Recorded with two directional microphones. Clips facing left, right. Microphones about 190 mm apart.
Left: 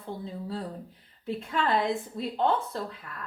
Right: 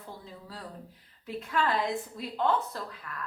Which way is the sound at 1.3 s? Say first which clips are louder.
Left 2 dB; 30° left (ahead or behind).